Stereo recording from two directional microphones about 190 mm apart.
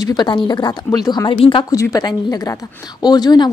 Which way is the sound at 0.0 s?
20° left (ahead or behind).